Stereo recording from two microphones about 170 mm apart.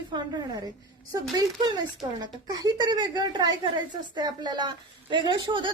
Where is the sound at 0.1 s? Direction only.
25° right (ahead or behind).